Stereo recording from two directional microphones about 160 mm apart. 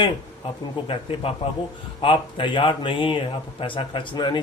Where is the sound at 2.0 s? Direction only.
30° left (ahead or behind).